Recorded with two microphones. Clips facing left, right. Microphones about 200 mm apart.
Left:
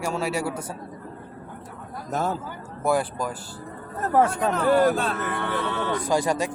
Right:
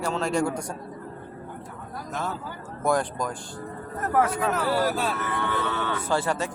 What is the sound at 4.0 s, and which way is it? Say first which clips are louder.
Speech: left 3 dB; 30° left (ahead or behind).